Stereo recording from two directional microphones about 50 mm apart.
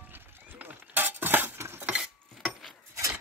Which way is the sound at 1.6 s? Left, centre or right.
Right.